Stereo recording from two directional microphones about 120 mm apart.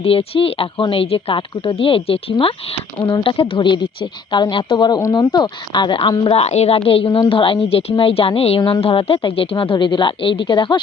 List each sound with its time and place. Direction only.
0.0 s a woman's voice: 50° left (ahead or behind)
6.4 s a woman's voice: 65° left (ahead or behind); by 10.8 s 40° left (ahead or behind)